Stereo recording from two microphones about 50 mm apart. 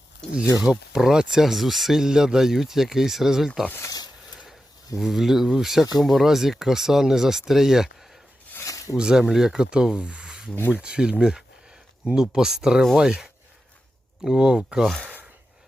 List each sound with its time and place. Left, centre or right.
0.5 s speech: centre
4.9 s speech: centre
8.6 s a sound: left
9.0 s speech: centre